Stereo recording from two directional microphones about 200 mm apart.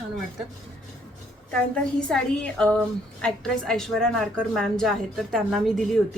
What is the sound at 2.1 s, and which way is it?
A woman's voice, 5° left (ahead or behind).